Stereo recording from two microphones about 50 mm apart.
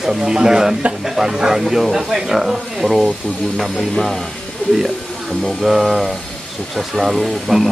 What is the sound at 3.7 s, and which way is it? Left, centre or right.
Speech, centre.